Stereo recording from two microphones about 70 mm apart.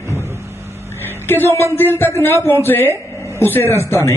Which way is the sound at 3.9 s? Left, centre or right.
Left.